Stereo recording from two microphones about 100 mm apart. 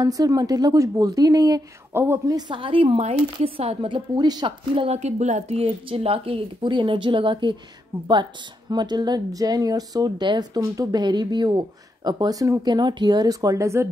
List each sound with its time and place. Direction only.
0.0 s a woman's voice: 40° right (ahead or behind)
2.0 s a woman's voice: 25° right (ahead or behind)
2.3 s speech: 50° right (ahead or behind); by 4.0 s 70° right (ahead or behind)
4.2 s a woman's voice: 45° right (ahead or behind); by 13.8 s 30° right (ahead or behind)